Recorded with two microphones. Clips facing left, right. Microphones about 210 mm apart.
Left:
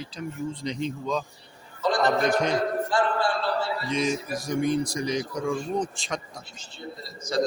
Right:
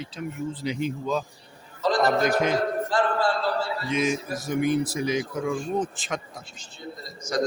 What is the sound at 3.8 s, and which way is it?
Speech, 5° right (ahead or behind).